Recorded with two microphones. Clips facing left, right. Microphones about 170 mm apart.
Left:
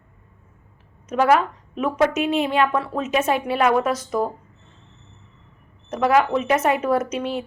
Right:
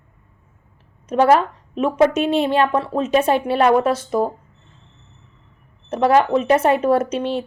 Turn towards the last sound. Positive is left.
turn(degrees=-30)  # may be behind; listen again after turning